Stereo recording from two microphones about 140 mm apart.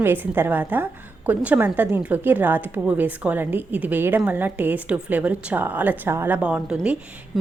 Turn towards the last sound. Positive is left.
turn(degrees=-5)  # may be behind; listen again after turning